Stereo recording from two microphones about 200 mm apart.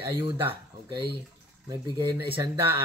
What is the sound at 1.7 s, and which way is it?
Speech, 25° right (ahead or behind).